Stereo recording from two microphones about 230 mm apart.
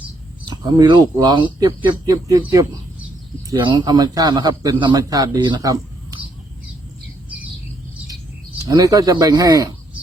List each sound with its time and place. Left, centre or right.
0.4 s a man's voice: centre
8.6 s a man's voice: centre